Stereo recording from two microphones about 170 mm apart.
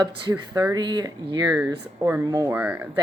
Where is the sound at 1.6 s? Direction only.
15° right (ahead or behind).